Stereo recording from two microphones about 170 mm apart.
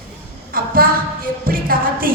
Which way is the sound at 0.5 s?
60° right (ahead or behind).